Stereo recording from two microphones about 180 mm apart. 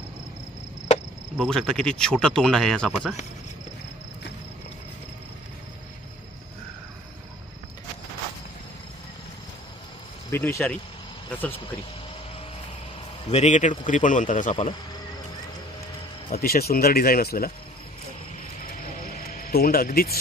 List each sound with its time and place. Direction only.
1.3 s speech: centre (ahead or behind)
10.3 s speech: 15° left (ahead or behind)
13.3 s speech: 40° left (ahead or behind)
16.3 s speech: 55° left (ahead or behind)
19.3 s speech: 55° left (ahead or behind)